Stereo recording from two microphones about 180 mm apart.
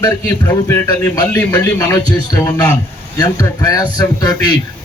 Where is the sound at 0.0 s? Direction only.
15° left (ahead or behind).